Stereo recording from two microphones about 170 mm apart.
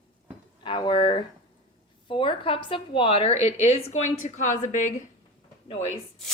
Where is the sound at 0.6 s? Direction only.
25° left (ahead or behind); by 4.9 s 45° left (ahead or behind).